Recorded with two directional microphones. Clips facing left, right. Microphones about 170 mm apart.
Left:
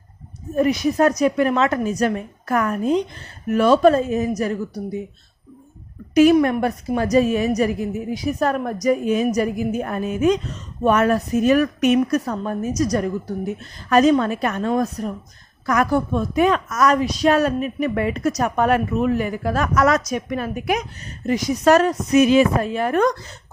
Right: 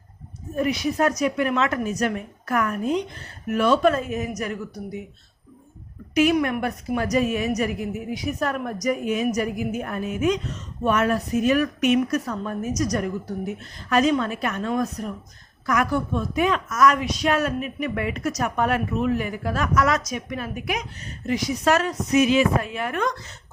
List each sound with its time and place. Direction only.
0.5 s a woman's voice: 40° left (ahead or behind)
6.1 s a woman's voice: 35° left (ahead or behind)